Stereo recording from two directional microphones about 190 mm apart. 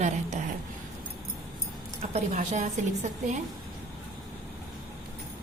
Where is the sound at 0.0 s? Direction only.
40° right (ahead or behind).